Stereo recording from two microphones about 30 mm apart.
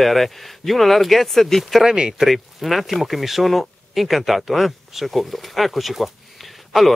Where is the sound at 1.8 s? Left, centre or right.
Right.